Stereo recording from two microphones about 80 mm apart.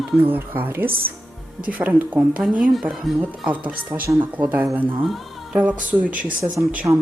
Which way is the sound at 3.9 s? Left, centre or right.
Right.